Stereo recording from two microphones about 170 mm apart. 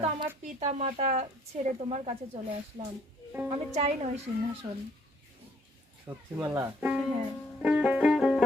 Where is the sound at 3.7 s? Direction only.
40° right (ahead or behind).